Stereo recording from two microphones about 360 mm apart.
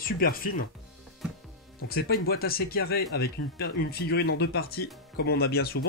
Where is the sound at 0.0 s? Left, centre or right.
Left.